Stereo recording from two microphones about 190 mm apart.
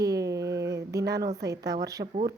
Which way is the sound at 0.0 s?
20° right (ahead or behind).